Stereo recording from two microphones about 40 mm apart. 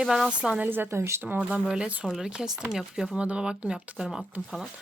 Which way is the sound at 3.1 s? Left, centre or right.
Right.